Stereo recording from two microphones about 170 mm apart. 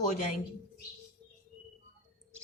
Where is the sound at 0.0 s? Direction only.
45° left (ahead or behind).